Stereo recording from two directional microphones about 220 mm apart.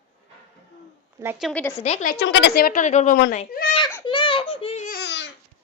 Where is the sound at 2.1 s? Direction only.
55° left (ahead or behind); by 3.2 s 30° left (ahead or behind).